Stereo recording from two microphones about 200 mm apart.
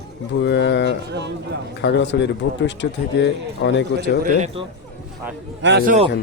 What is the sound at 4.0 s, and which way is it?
Speech, 40° right (ahead or behind).